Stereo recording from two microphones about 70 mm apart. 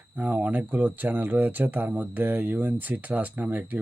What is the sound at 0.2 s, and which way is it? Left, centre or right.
Speech, right.